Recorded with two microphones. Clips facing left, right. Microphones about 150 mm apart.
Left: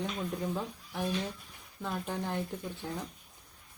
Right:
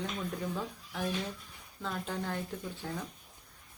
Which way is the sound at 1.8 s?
15° left (ahead or behind).